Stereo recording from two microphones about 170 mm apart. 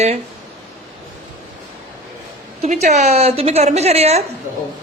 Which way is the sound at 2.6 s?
45° right (ahead or behind).